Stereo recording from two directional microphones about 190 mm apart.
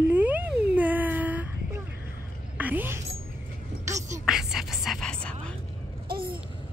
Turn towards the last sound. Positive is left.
turn(degrees=-50)  # may be behind; listen again after turning